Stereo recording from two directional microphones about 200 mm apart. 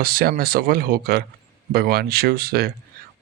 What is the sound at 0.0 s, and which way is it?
Speech, 50° right (ahead or behind).